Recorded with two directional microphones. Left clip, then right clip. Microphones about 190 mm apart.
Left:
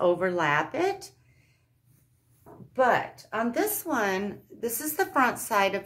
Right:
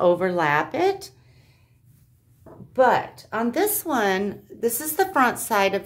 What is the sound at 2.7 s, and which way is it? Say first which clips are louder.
A woman's voice: right 5 dB; 35° right (ahead or behind).